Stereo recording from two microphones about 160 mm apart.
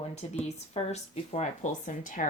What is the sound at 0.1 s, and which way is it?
Speech, 40° left (ahead or behind).